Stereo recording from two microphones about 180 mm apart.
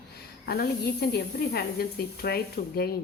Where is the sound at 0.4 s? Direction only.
60° left (ahead or behind).